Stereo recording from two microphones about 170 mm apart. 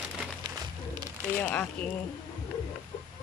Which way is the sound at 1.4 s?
10° left (ahead or behind).